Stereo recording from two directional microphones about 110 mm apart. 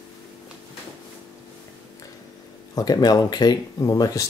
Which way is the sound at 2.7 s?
35° left (ahead or behind).